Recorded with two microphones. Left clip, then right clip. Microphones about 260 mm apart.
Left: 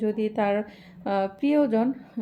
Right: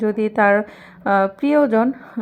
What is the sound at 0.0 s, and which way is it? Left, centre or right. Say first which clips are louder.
A woman's voice: right 9 dB; centre.